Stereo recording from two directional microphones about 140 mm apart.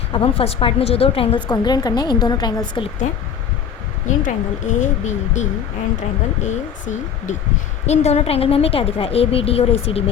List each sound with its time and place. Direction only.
0.1 s a woman's voice: 40° left (ahead or behind)
1.5 s a woman's voice: 30° left (ahead or behind)
4.1 s a woman's voice: 60° left (ahead or behind); by 10.0 s 45° left (ahead or behind)